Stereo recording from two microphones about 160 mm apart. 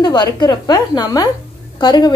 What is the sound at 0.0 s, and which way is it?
A woman's voice, 25° left (ahead or behind).